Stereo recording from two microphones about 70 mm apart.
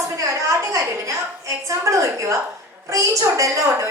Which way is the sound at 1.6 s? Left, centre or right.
Right.